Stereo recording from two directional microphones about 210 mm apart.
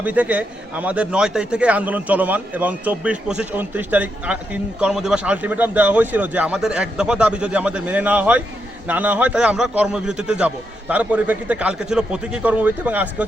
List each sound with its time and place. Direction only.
0.0 s a man's voice: 5° right (ahead or behind)